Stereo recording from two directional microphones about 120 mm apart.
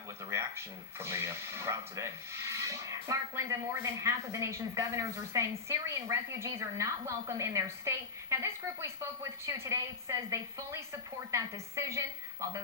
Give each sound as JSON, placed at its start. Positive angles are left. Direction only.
{"t": 0.3, "sound": "speech", "side_deg": -20}